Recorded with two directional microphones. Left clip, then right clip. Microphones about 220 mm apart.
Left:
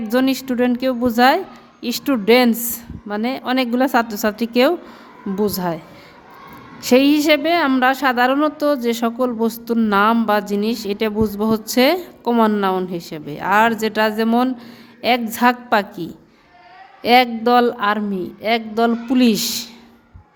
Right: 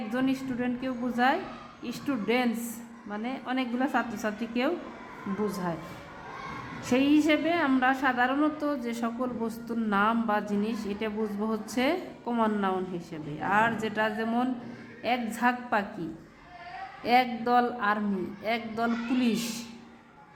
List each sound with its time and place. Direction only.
0.1 s a woman's voice: 50° left (ahead or behind)
6.8 s a woman's voice: 50° left (ahead or behind)